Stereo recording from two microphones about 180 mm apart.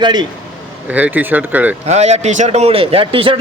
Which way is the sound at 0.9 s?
10° right (ahead or behind).